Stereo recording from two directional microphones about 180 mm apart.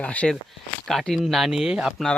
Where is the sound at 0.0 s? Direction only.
5° left (ahead or behind).